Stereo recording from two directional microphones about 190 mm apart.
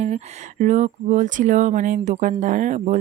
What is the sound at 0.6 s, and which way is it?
Speech, 40° right (ahead or behind).